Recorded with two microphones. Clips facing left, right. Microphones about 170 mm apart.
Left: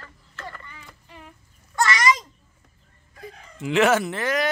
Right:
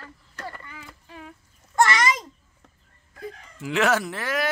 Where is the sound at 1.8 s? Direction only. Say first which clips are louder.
Left 3 dB; 55° right (ahead or behind).